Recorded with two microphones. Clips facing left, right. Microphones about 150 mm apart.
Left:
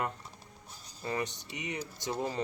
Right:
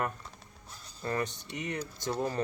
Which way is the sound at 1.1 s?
15° left (ahead or behind).